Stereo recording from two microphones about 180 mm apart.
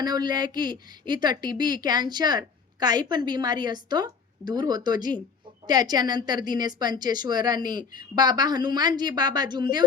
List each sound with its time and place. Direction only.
0.0 s a woman's voice: 25° right (ahead or behind)